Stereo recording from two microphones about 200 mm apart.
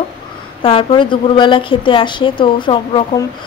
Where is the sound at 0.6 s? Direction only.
25° left (ahead or behind).